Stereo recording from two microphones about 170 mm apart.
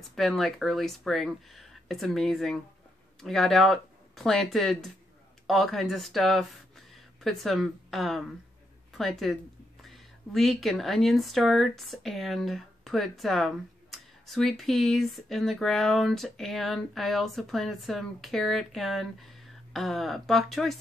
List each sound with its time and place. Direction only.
0.1 s speech: centre (ahead or behind)
8.9 s a sound: centre (ahead or behind)
10.3 s speech: centre (ahead or behind)